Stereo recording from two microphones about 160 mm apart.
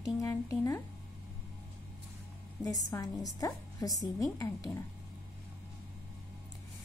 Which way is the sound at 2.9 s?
20° left (ahead or behind).